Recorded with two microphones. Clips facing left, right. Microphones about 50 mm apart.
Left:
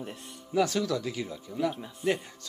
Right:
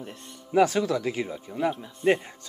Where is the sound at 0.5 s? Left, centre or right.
Right.